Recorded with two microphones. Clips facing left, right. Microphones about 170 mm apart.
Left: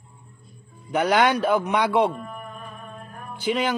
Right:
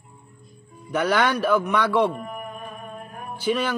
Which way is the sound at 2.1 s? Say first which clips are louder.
Right 2 dB; 20° right (ahead or behind).